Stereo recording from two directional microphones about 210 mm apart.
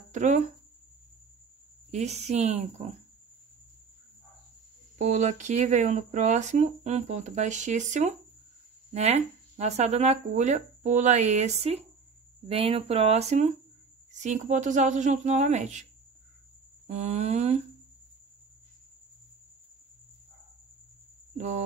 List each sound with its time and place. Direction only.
0.1 s speech: 35° right (ahead or behind)
1.9 s speech: 30° right (ahead or behind)
4.9 s speech: 35° right (ahead or behind)
16.8 s speech: 30° right (ahead or behind)